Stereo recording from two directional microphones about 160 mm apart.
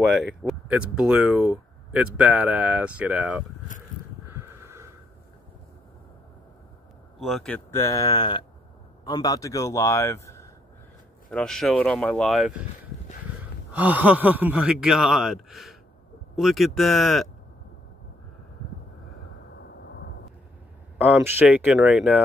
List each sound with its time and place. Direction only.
0.0 s speech: centre (ahead or behind)
4.3 s a sound: 15° right (ahead or behind)
7.2 s a man's voice: centre (ahead or behind); by 10.5 s 15° left (ahead or behind)
11.2 s speech: 5° left (ahead or behind)
13.7 s speech: 10° right (ahead or behind)
21.0 s speech: 10° right (ahead or behind)